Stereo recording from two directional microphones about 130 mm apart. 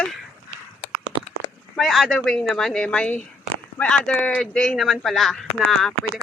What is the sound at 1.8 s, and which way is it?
Speech, centre (ahead or behind).